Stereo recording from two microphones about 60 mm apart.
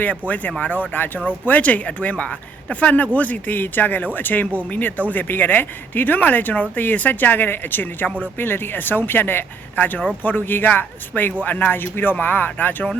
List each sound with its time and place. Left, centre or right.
0.0 s speech: left